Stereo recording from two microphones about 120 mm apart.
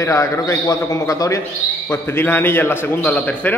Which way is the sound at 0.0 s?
25° left (ahead or behind).